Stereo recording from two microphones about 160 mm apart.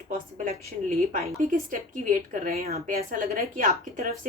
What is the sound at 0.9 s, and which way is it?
A woman's voice, 55° right (ahead or behind).